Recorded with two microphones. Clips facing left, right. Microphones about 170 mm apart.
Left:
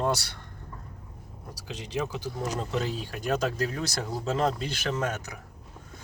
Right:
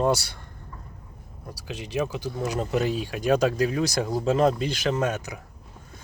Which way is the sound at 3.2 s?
15° right (ahead or behind).